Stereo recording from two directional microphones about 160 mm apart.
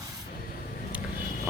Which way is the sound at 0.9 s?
10° right (ahead or behind).